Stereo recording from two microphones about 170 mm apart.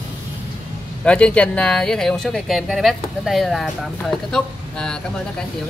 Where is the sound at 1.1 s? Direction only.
5° left (ahead or behind).